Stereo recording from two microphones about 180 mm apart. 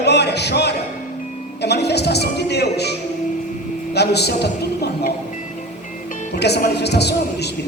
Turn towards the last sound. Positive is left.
turn(degrees=65)  # may be behind; listen again after turning